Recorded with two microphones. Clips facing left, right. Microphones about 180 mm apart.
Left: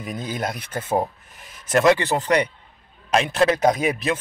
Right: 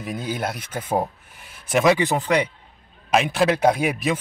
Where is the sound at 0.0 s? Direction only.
5° right (ahead or behind).